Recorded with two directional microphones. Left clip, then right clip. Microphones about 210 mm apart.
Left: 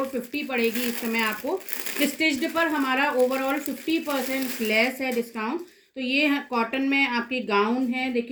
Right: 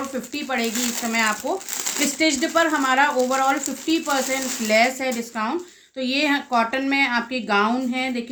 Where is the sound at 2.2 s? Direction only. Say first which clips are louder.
Right 5 dB; 15° right (ahead or behind).